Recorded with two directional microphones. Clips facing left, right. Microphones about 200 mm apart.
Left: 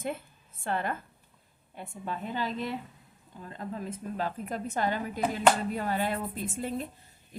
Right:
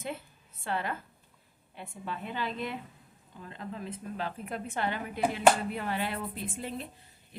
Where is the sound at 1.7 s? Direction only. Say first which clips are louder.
Left 2 dB; 45° left (ahead or behind).